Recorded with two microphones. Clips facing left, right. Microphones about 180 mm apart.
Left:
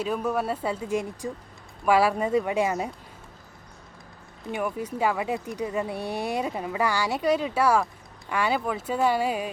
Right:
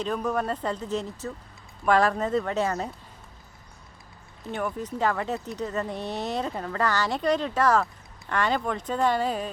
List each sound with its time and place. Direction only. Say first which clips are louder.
0.0 s speech: left 1 dB; 10° left (ahead or behind)
4.5 s speech: left 1 dB; 10° left (ahead or behind)